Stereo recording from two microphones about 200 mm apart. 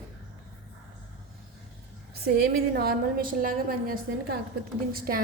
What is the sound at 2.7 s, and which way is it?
A woman's voice, 45° right (ahead or behind).